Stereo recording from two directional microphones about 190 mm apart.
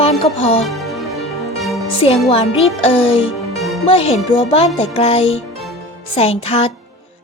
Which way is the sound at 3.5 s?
Centre (ahead or behind).